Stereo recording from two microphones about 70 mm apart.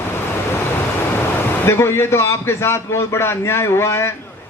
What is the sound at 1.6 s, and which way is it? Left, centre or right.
A man's voice, left.